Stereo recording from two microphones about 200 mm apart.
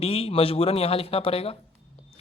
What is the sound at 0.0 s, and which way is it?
Speech, 30° left (ahead or behind).